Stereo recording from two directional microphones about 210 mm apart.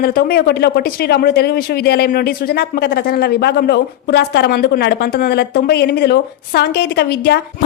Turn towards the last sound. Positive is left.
turn(degrees=50)  # may be behind; listen again after turning